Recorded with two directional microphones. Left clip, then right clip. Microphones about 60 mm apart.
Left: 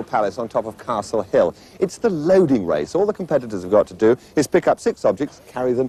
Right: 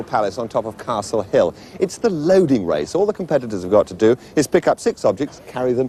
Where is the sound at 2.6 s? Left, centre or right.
Centre.